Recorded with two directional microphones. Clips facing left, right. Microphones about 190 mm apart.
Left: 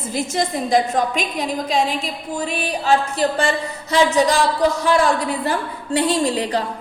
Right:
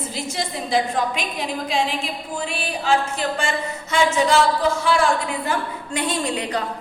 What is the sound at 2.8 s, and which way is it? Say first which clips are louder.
A woman's voice: left 3 dB; 35° left (ahead or behind).